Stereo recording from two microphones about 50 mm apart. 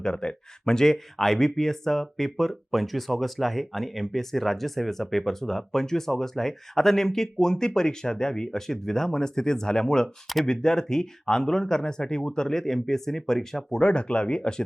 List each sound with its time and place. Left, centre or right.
0.0 s speech: centre
13.7 s speech: centre